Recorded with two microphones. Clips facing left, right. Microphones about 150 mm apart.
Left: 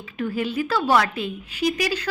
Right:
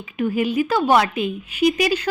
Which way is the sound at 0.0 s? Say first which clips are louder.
Right 5 dB; 15° right (ahead or behind).